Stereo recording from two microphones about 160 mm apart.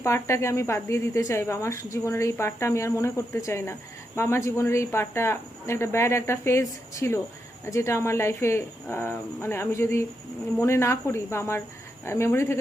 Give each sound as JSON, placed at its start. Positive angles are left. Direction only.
{"t": 0.0, "sound": "a woman's voice", "side_deg": 15}